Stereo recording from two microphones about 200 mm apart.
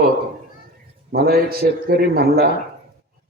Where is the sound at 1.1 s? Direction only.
50° right (ahead or behind).